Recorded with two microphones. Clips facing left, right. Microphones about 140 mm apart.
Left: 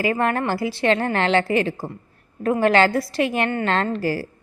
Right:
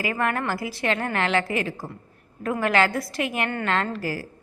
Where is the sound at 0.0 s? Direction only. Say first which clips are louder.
Left 4 dB; 30° left (ahead or behind).